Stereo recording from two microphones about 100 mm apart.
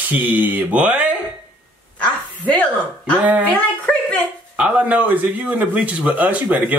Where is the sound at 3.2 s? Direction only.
15° right (ahead or behind).